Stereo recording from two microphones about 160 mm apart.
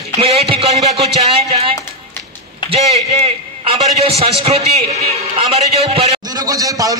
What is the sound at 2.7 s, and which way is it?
A man's voice, 40° right (ahead or behind).